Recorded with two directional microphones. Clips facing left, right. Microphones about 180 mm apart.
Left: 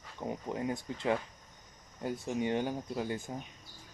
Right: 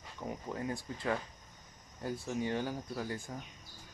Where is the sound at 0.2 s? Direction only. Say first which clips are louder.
Left 3 dB; 20° left (ahead or behind).